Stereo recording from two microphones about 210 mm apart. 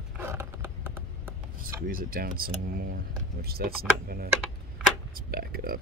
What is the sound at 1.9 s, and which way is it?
Speech, 45° right (ahead or behind).